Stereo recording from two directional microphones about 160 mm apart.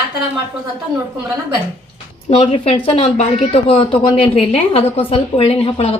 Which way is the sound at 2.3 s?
35° left (ahead or behind).